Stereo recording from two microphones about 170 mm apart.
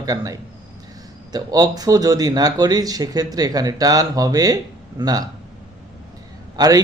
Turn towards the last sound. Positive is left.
turn(degrees=-20)  # may be behind; listen again after turning